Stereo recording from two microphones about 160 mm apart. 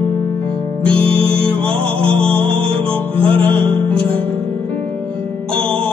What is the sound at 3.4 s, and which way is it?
Music, 10° left (ahead or behind).